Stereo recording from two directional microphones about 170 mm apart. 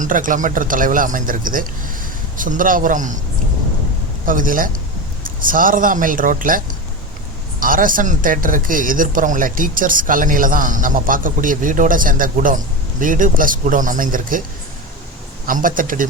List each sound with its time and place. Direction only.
0.0 s speech: 50° right (ahead or behind)
4.3 s speech: 55° right (ahead or behind)
7.6 s speech: 55° right (ahead or behind)
15.4 s speech: 55° right (ahead or behind)